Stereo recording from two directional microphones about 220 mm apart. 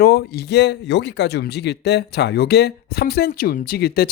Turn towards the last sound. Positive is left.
turn(degrees=45)  # may be behind; listen again after turning